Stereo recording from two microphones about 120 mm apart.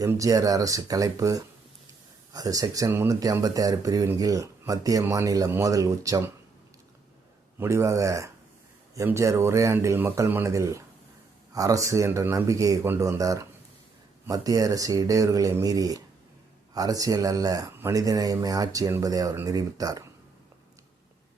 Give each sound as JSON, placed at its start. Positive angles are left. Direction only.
{"t": 0.1, "sound": "speech", "side_deg": -30}
{"t": 2.9, "sound": "speech", "side_deg": -20}
{"t": 3.4, "sound": "speech", "side_deg": -30}
{"t": 7.6, "sound": "speech", "side_deg": -25}